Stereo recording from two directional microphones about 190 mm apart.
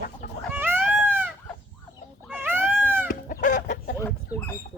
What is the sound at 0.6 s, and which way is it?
Dog, 10° right (ahead or behind).